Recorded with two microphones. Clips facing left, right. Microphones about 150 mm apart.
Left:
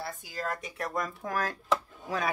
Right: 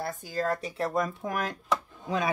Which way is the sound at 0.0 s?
40° right (ahead or behind).